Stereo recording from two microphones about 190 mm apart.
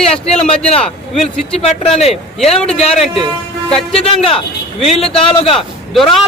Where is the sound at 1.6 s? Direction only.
30° left (ahead or behind).